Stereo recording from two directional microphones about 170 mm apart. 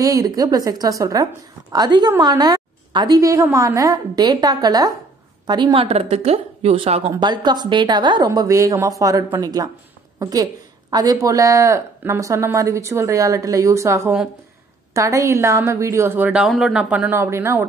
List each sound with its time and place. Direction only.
0.0 s a woman's voice: 20° right (ahead or behind)